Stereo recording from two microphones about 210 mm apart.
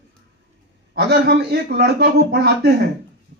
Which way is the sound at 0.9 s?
50° right (ahead or behind).